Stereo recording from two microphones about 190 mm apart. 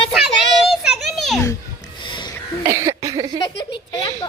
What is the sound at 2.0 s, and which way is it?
Music, 25° left (ahead or behind).